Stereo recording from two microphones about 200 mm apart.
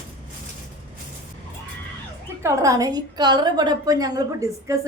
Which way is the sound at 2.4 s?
15° right (ahead or behind).